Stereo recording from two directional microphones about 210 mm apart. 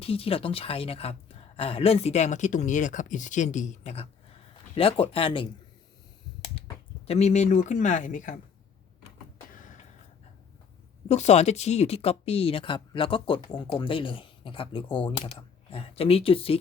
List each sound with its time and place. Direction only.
0.0 s speech: 25° left (ahead or behind)
7.1 s speech: 30° left (ahead or behind)
11.1 s speech: 30° left (ahead or behind)